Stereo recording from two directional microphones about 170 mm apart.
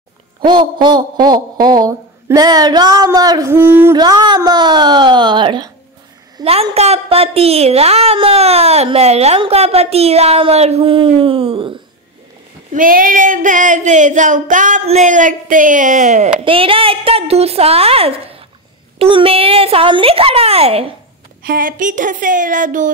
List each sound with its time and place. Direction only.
0.5 s a woman's voice: 30° right (ahead or behind)
3.9 s a woman's voice: 25° right (ahead or behind)
12.7 s child singing: 55° right (ahead or behind)
16.3 s a woman's voice: 30° right (ahead or behind)
21.4 s child singing: 60° right (ahead or behind)